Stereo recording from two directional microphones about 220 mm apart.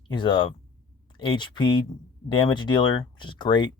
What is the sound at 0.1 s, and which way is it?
Speech, 20° left (ahead or behind).